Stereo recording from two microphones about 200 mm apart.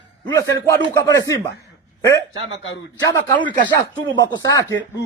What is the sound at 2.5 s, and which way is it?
Speech, 70° left (ahead or behind).